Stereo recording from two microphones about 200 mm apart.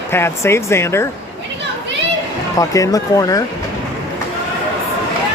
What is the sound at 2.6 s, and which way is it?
Speech, 15° left (ahead or behind).